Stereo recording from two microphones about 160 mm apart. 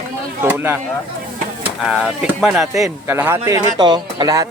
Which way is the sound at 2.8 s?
15° right (ahead or behind).